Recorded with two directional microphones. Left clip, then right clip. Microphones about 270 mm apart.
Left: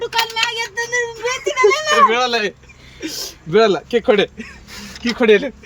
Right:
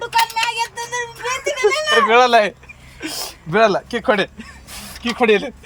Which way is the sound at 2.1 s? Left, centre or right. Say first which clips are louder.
Right 5 dB; centre.